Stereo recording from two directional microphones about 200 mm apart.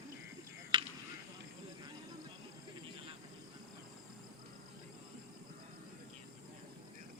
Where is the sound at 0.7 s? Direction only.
25° right (ahead or behind).